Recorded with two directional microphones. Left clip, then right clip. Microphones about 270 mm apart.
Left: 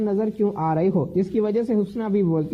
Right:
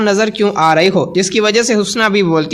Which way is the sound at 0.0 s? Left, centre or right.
Centre.